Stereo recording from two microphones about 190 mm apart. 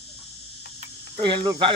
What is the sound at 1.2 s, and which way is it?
Speech, 25° right (ahead or behind).